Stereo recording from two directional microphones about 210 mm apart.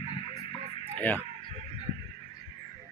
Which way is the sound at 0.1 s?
25° left (ahead or behind).